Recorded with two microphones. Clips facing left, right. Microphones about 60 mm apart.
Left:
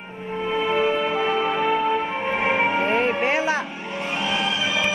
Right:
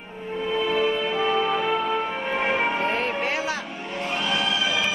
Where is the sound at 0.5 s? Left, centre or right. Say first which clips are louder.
Left 2 dB; left.